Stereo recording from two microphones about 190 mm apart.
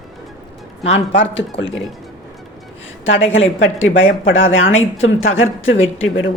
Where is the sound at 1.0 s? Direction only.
75° left (ahead or behind).